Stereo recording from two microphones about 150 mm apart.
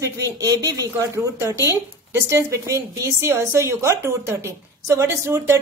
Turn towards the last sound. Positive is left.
turn(degrees=-20)  # may be behind; listen again after turning